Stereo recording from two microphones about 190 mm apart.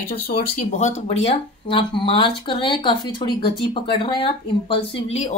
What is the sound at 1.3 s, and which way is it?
Speech, 25° left (ahead or behind).